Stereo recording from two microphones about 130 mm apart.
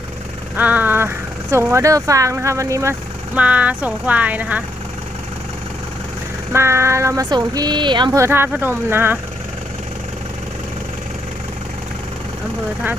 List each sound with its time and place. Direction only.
0.5 s speech: 15° right (ahead or behind)
3.3 s speech: 10° right (ahead or behind)
6.5 s speech: 20° right (ahead or behind); by 8.1 s 35° right (ahead or behind)
8.1 s speech: 20° right (ahead or behind)